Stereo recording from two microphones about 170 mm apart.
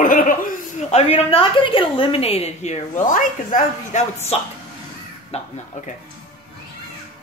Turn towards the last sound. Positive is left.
turn(degrees=40)  # may be behind; listen again after turning